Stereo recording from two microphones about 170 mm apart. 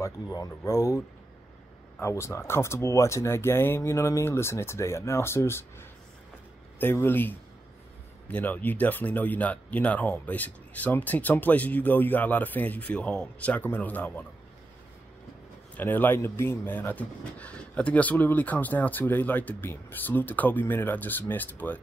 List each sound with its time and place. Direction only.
0.0 s speech: 20° left (ahead or behind)
15.8 s speech: 10° left (ahead or behind)